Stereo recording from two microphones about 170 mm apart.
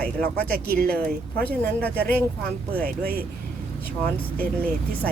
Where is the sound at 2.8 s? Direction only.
65° right (ahead or behind).